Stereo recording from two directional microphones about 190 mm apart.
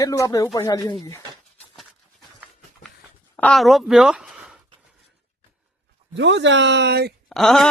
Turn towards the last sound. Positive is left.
turn(degrees=0)  # may be behind; listen again after turning